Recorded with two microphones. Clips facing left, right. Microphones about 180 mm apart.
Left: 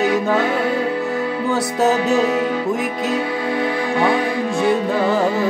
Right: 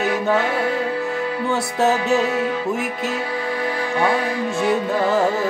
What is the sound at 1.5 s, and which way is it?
Music, centre (ahead or behind).